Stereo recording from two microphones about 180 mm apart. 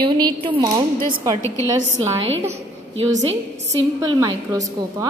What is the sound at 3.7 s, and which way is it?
A woman's voice, 20° right (ahead or behind).